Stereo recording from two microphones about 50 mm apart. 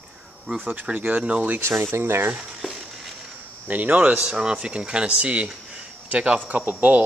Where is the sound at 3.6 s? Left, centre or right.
Right.